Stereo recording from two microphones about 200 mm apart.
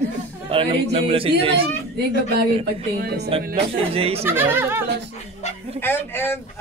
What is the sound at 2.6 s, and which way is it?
Speech, 50° right (ahead or behind).